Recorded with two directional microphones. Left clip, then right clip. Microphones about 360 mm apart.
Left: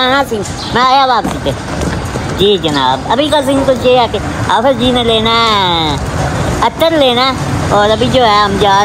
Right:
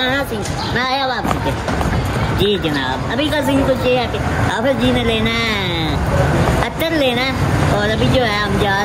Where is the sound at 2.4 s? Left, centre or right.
Centre.